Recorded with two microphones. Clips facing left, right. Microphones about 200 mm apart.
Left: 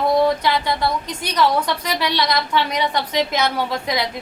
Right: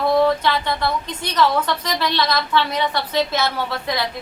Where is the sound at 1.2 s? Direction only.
10° left (ahead or behind).